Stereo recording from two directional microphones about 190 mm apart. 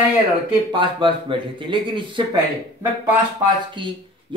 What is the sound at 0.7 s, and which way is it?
A man's voice, 25° right (ahead or behind).